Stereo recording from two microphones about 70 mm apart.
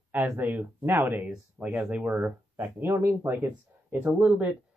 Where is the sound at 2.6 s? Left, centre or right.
Right.